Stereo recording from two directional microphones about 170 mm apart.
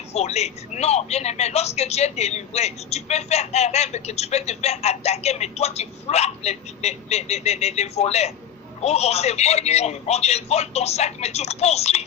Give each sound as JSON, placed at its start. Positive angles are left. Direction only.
{"t": 0.1, "sound": "speech", "side_deg": 40}